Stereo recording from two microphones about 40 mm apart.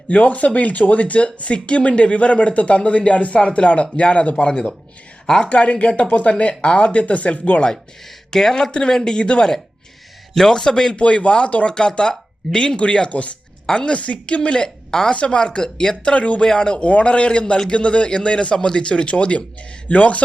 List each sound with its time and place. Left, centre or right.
0.1 s speech: left; by 5.5 s centre
5.5 s speech: left
8.3 s speech: centre
10.9 s speech: left
13.7 s speech: left
14.0 s speech: left
14.5 s a woman's voice: centre
15.1 s speech: left
16.1 s speech: left